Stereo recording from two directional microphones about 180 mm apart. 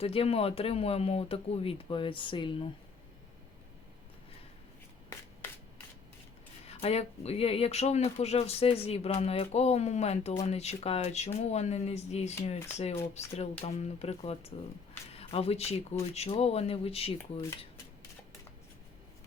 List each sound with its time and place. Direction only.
0.0 s speech: 30° left (ahead or behind)
6.7 s speech: 35° left (ahead or behind)
15.1 s a sound: 35° left (ahead or behind)
16.1 s speech: 35° left (ahead or behind)